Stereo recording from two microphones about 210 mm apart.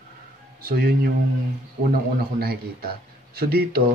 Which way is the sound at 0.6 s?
45° right (ahead or behind).